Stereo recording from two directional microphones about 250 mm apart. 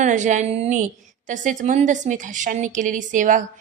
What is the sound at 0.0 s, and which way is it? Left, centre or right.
A woman's voice, right.